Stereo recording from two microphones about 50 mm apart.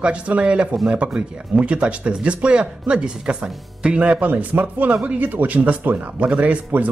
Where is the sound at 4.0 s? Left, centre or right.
Right.